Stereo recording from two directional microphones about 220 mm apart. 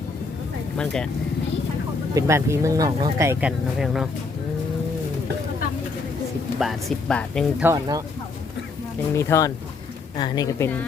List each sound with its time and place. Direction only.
0.8 s speech: 5° left (ahead or behind)
2.1 s speech: 15° right (ahead or behind)
3.8 s speech: centre (ahead or behind)
6.6 s speech: centre (ahead or behind)
7.6 s speech: 15° right (ahead or behind)
9.1 s a woman's voice: 10° left (ahead or behind)